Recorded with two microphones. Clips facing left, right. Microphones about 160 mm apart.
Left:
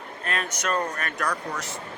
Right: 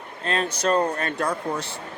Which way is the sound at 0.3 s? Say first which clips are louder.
Right 6 dB; 30° right (ahead or behind).